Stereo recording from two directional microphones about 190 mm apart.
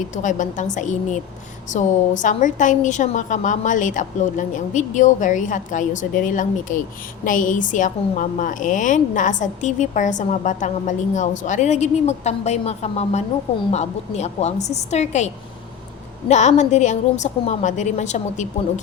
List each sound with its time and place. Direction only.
0.2 s a woman's voice: 40° left (ahead or behind)
16.3 s a woman's voice: 40° left (ahead or behind)